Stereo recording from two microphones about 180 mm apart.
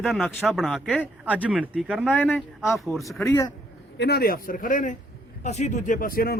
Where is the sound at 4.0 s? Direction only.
65° left (ahead or behind).